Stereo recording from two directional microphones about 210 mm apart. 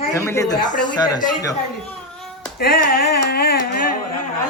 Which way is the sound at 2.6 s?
50° left (ahead or behind).